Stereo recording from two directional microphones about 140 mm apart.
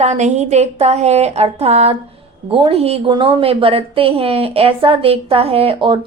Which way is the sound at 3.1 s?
35° right (ahead or behind).